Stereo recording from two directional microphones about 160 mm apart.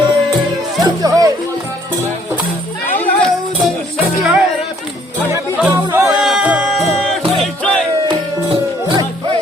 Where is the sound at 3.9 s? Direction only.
5° right (ahead or behind).